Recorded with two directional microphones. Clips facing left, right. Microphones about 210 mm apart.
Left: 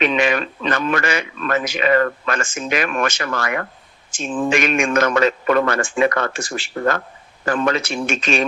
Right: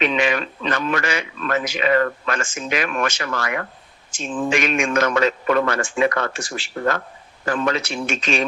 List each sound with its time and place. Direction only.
0.0 s a man's voice: 50° left (ahead or behind)